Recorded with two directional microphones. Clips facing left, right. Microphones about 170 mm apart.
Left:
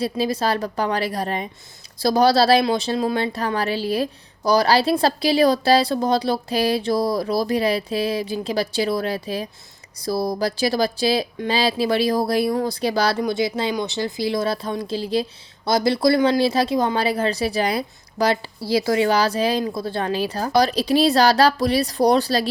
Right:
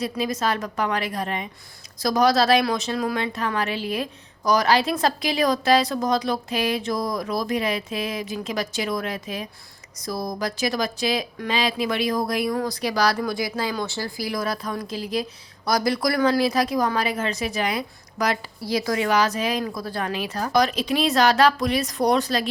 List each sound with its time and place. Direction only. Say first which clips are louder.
0.0 s speech: left 3 dB; 30° left (ahead or behind)